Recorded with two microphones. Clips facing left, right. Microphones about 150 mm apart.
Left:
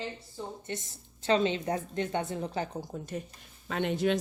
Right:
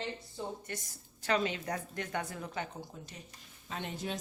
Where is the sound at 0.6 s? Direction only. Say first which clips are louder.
Left 5 dB; 25° left (ahead or behind).